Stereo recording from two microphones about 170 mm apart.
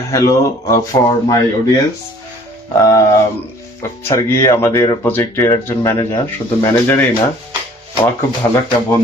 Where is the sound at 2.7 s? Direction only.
20° left (ahead or behind).